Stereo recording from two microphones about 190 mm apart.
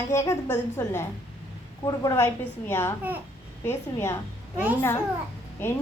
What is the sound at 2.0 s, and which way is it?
A woman's voice, 15° left (ahead or behind).